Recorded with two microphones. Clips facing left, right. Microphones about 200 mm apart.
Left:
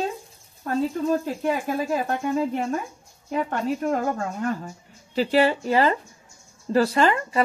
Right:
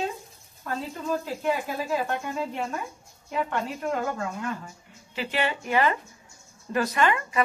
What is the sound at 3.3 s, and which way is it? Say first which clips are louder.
Speech: left 4 dB; 35° left (ahead or behind).